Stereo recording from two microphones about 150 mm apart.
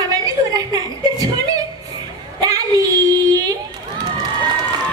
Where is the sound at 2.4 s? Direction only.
25° right (ahead or behind).